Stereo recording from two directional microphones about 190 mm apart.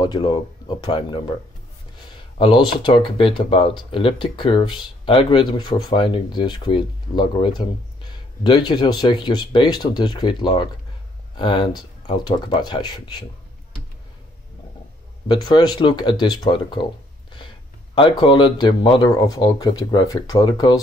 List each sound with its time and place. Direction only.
0.0 s speech: 25° left (ahead or behind)
2.3 s speech: 25° left (ahead or behind)
15.2 s speech: 20° left (ahead or behind)
17.9 s speech: 25° left (ahead or behind)